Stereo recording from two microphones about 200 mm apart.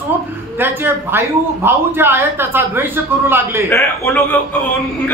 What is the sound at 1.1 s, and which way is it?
A man's voice, 10° right (ahead or behind).